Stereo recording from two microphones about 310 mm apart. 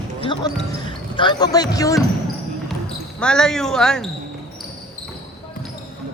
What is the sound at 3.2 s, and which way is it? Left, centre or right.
Speech, centre.